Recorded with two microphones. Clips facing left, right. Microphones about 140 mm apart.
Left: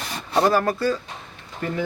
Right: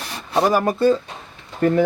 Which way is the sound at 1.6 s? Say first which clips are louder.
Right 11 dB; 45° right (ahead or behind).